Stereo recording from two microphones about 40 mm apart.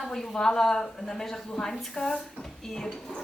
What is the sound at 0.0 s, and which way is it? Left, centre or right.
Speech, centre.